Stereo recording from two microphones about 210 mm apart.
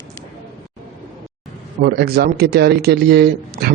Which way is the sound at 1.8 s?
50° right (ahead or behind).